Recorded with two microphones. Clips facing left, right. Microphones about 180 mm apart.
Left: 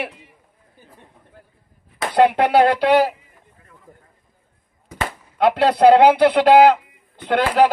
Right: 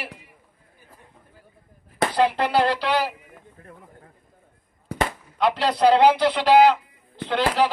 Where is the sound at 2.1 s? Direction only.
60° left (ahead or behind).